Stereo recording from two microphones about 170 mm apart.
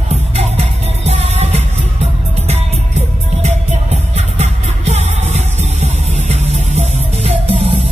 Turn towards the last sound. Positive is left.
turn(degrees=-35)  # may be behind; listen again after turning